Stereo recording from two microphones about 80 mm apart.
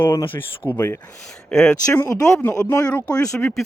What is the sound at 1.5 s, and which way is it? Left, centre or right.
Speech, centre.